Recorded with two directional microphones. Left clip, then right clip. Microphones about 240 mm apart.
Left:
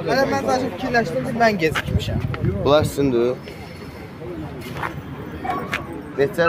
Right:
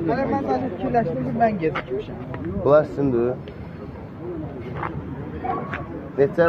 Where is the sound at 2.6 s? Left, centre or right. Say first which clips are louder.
Even; centre.